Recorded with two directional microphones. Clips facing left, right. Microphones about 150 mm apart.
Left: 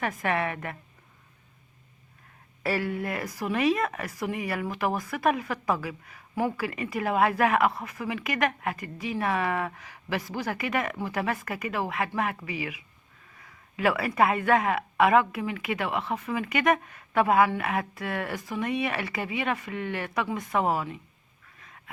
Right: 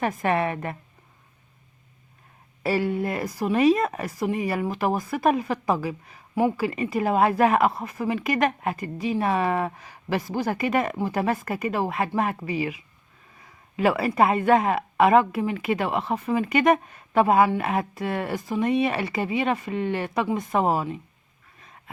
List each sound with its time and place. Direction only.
0.0 s speech: 30° right (ahead or behind)
2.6 s a woman's voice: 25° right (ahead or behind)